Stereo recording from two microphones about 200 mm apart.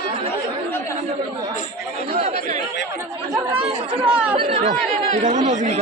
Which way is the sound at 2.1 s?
30° right (ahead or behind).